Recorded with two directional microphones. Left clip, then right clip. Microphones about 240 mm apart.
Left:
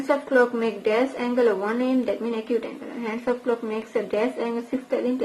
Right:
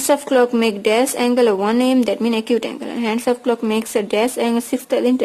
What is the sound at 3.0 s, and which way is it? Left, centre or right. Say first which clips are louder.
A woman's voice: right 7 dB; right.